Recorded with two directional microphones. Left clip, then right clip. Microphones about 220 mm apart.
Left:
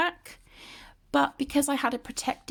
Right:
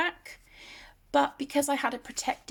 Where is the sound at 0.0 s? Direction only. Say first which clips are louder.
Left 2 dB; 30° left (ahead or behind).